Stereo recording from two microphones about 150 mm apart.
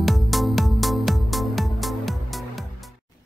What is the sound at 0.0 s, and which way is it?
Music, centre (ahead or behind).